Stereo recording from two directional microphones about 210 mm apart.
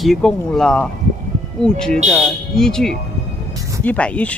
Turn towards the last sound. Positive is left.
turn(degrees=5)  # may be behind; listen again after turning